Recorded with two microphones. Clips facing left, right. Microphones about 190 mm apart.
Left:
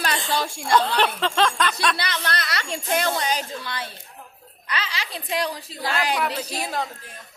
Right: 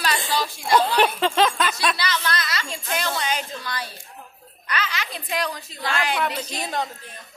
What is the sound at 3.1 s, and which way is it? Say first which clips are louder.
Speech: left 1 dB; 35° left (ahead or behind).